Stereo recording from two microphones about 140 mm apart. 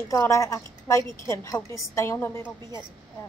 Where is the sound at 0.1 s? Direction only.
20° left (ahead or behind).